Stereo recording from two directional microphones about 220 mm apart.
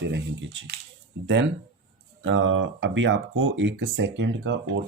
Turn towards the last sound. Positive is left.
turn(degrees=-55)  # may be behind; listen again after turning